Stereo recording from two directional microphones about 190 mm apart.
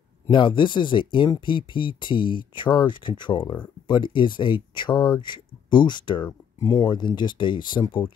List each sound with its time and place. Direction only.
0.3 s speech: 25° left (ahead or behind)